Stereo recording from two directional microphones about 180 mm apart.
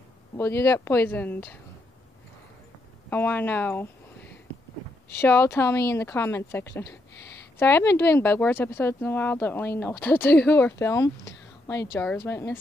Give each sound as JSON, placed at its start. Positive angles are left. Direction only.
{"t": 0.4, "sound": "speech", "side_deg": 15}
{"t": 3.1, "sound": "speech", "side_deg": 10}